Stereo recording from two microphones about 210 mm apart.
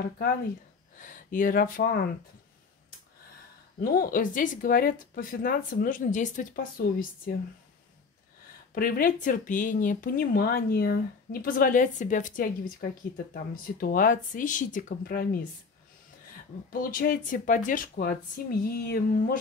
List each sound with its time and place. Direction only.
0.9 s speech: 40° left (ahead or behind)
3.8 s a woman's voice: 45° left (ahead or behind)
8.7 s a woman's voice: 45° left (ahead or behind)
16.7 s speech: 45° left (ahead or behind)